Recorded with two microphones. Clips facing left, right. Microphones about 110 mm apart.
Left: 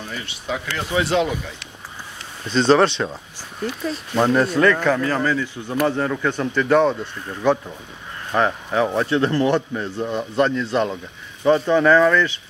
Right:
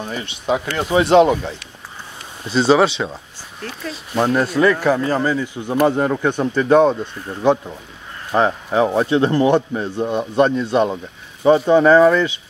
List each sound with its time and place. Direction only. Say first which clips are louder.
0.0 s a man's voice: right 6 dB; 20° right (ahead or behind)
1.1 s speech: right 12 dB; 45° right (ahead or behind)
2.4 s a man's voice: right 1 dB; 5° right (ahead or behind); by 12.4 s 20° right (ahead or behind)